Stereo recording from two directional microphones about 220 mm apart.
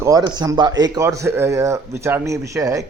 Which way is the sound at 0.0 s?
15° right (ahead or behind).